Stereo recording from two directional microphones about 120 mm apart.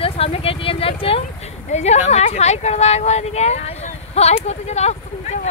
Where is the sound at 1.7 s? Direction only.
70° left (ahead or behind).